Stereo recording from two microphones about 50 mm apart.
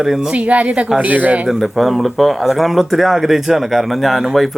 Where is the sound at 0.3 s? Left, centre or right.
Right.